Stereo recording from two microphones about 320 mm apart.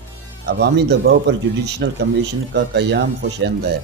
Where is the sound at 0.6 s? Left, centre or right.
Right.